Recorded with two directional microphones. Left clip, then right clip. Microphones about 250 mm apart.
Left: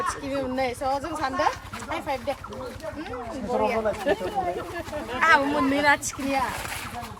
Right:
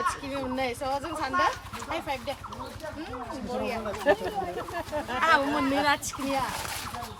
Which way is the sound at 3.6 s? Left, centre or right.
Centre.